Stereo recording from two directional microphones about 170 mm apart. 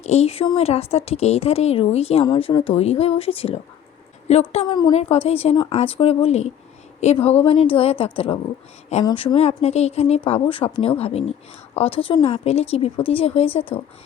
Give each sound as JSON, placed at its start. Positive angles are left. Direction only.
{"t": 0.0, "sound": "a woman's voice", "side_deg": 40}
{"t": 2.2, "sound": "a woman's voice", "side_deg": 25}
{"t": 4.7, "sound": "speech", "side_deg": 25}
{"t": 4.9, "sound": "a woman's voice", "side_deg": 40}